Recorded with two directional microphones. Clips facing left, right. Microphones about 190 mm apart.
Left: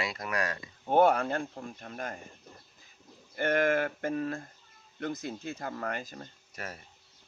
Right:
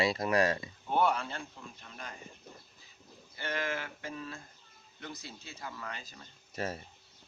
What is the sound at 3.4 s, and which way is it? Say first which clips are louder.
Speech: left 10 dB; 50° left (ahead or behind).